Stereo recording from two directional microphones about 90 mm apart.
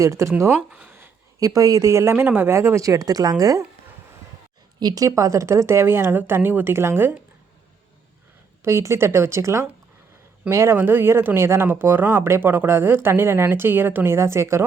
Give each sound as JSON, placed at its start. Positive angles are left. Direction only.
{"t": 0.0, "sound": "a woman's voice", "side_deg": -35}
{"t": 0.7, "sound": "a sound", "side_deg": -15}
{"t": 1.4, "sound": "a woman's voice", "side_deg": -40}
{"t": 4.8, "sound": "speech", "side_deg": -45}
{"t": 8.6, "sound": "a woman's voice", "side_deg": -30}